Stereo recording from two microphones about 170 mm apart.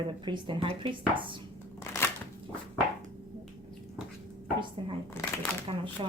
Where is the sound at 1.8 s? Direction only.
15° left (ahead or behind).